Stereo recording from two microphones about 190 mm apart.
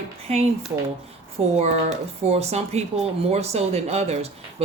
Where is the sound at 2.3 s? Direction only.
35° right (ahead or behind).